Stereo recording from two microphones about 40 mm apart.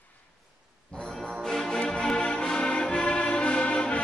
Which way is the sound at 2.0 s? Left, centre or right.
Centre.